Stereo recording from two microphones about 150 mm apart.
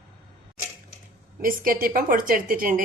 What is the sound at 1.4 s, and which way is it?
A woman's voice, 70° right (ahead or behind).